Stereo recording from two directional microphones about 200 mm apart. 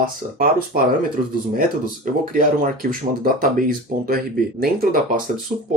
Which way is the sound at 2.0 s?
45° right (ahead or behind).